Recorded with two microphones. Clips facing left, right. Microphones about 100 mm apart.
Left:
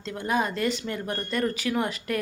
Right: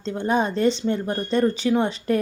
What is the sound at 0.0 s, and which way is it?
A woman's voice, 30° right (ahead or behind).